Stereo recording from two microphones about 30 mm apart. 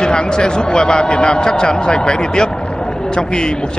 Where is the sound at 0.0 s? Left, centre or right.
Left.